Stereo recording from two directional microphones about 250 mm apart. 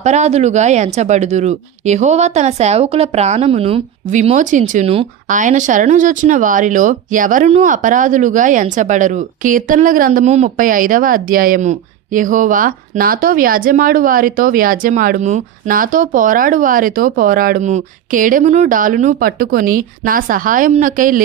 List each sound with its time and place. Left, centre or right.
0.0 s speech: right